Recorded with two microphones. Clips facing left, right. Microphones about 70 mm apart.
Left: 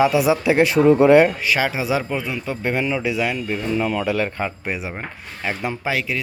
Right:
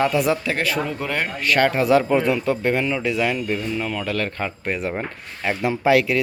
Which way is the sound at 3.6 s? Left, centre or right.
Centre.